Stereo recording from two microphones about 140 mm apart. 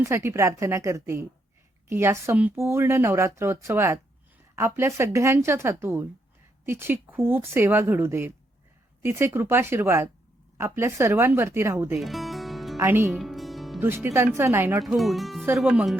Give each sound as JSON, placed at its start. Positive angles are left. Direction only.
{"t": 0.0, "sound": "speech", "side_deg": -20}
{"t": 11.9, "sound": "music", "side_deg": 0}
{"t": 12.8, "sound": "speech", "side_deg": -15}
{"t": 13.1, "sound": "music", "side_deg": 0}
{"t": 13.7, "sound": "speech", "side_deg": -15}
{"t": 14.8, "sound": "speech", "side_deg": 0}